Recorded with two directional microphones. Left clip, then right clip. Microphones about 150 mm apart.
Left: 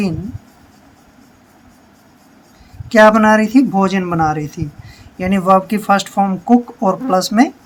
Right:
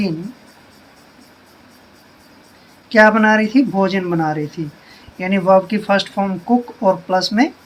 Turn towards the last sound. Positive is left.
turn(degrees=45)  # may be behind; listen again after turning